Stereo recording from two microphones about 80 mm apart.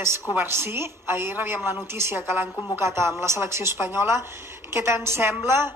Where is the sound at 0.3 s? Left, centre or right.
Right.